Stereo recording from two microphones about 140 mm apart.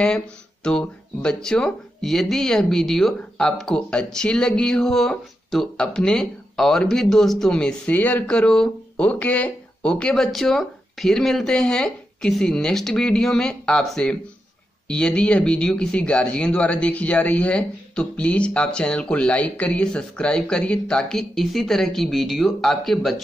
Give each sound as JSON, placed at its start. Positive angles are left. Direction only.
{"t": 0.7, "sound": "speech", "side_deg": 5}